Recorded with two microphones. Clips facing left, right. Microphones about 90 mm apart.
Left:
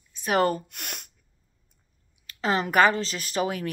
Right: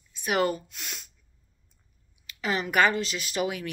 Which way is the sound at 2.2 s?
40° left (ahead or behind).